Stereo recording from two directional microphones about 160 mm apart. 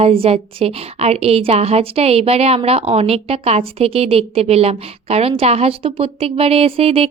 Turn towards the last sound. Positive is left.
turn(degrees=-35)  # may be behind; listen again after turning